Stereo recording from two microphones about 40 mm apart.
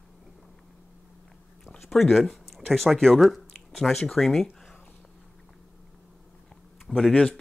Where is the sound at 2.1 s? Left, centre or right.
Centre.